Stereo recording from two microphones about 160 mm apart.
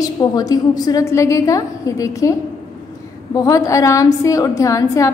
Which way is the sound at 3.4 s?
20° left (ahead or behind).